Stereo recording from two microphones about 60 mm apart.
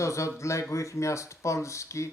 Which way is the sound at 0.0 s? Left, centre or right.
Left.